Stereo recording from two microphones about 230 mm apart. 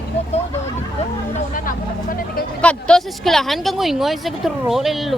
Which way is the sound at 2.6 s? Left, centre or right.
Centre.